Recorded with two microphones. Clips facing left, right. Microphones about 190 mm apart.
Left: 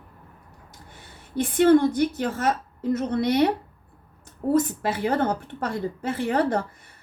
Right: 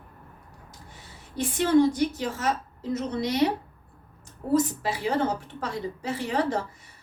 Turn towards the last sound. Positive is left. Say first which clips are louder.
# left 3 dB
turn(degrees=55)  # may be behind; listen again after turning